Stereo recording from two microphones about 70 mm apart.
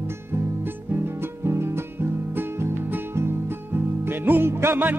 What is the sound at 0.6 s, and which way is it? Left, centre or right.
Music, right.